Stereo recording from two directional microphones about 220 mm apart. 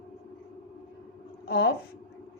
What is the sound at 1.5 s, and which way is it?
Speech, 45° left (ahead or behind).